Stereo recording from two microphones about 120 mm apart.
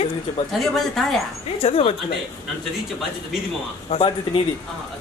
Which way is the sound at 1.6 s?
55° left (ahead or behind).